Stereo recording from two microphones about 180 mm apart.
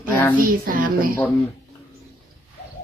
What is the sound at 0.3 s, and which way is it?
Speech, 50° right (ahead or behind).